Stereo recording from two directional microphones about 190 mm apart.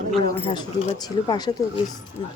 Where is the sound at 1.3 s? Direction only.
20° left (ahead or behind).